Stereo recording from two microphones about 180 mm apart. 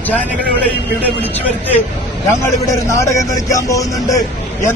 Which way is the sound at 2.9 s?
15° left (ahead or behind).